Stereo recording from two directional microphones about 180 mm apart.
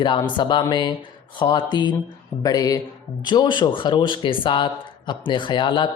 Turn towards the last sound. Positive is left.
turn(degrees=25)  # may be behind; listen again after turning